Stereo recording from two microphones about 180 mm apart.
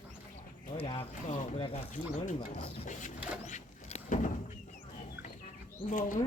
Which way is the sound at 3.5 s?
40° left (ahead or behind).